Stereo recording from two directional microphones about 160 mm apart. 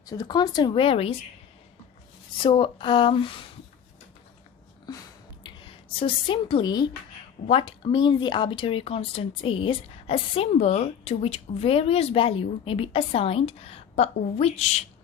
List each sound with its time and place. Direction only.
0.0 s speech: 25° left (ahead or behind)
2.4 s speech: 30° left (ahead or behind)
5.4 s a woman's voice: 35° left (ahead or behind)